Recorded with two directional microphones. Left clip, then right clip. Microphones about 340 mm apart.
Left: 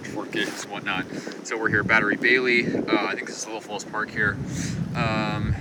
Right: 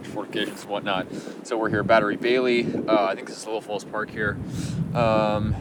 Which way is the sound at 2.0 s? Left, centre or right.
Right.